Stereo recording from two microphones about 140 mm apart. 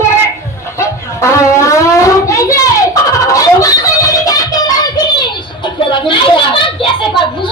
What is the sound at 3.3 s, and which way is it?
Music, 25° left (ahead or behind).